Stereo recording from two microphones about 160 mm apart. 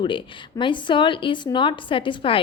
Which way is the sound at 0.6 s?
30° left (ahead or behind).